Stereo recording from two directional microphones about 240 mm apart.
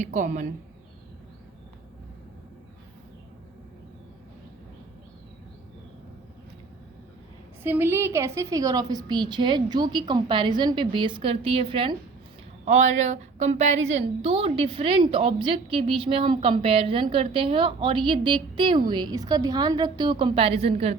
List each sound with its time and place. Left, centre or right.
0.0 s speech: right
7.6 s a woman's voice: centre